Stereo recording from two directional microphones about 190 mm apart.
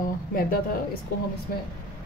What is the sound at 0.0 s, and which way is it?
Speech, 50° left (ahead or behind).